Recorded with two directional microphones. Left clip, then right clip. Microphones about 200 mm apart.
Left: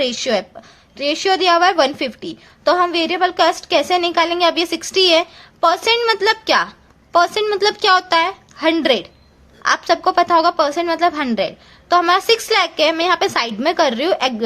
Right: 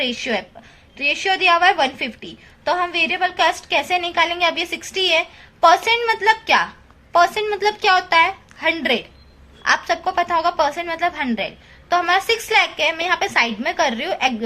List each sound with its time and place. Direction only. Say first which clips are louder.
0.0 s a woman's voice: left 4 dB; 50° left (ahead or behind)